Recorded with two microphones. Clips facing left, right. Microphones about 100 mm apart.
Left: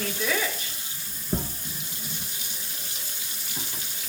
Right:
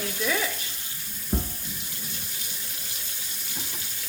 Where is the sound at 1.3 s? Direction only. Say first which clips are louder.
Even; 10° right (ahead or behind).